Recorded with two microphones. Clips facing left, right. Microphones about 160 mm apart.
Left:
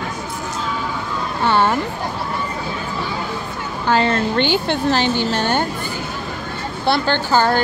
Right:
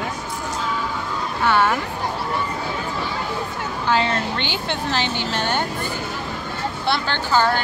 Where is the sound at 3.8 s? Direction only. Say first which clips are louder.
Left 4 dB; 45° left (ahead or behind).